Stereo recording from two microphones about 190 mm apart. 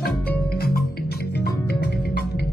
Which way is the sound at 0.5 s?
55° left (ahead or behind).